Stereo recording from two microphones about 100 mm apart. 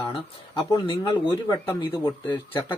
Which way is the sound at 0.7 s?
55° left (ahead or behind).